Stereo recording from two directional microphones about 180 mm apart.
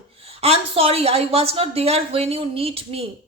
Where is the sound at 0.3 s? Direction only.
35° right (ahead or behind).